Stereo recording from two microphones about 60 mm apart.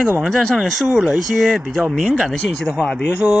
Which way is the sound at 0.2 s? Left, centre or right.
Centre.